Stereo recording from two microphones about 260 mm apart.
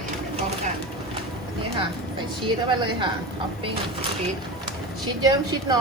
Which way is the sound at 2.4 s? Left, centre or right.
Centre.